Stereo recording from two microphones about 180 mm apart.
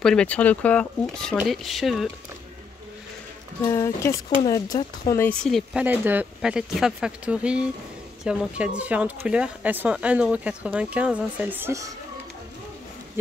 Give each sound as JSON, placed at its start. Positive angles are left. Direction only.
{"t": 0.0, "sound": "speech", "side_deg": 5}
{"t": 3.6, "sound": "speech", "side_deg": 15}
{"t": 5.2, "sound": "speech", "side_deg": 5}